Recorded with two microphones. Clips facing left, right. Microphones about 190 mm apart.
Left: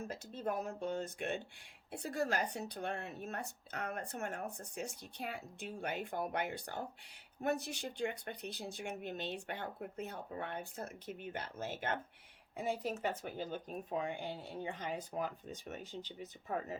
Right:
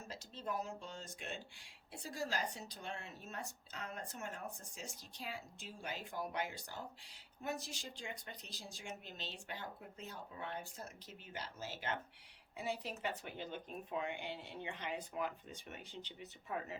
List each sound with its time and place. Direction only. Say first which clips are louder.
0.0 s a woman's voice: left 7 dB; 55° left (ahead or behind)